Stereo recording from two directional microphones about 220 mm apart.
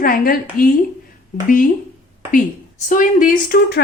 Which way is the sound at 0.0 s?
40° left (ahead or behind).